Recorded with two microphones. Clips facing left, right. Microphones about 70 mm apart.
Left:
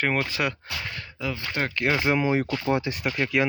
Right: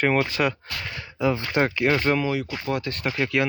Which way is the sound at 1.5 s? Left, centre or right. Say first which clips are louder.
Right 3 dB; centre.